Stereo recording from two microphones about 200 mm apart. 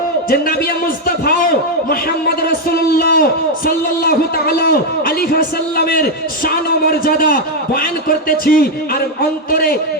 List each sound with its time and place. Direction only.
1.0 s a man's voice: 45° left (ahead or behind)